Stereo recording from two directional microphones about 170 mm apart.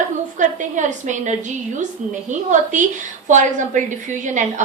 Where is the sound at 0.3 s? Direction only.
45° right (ahead or behind).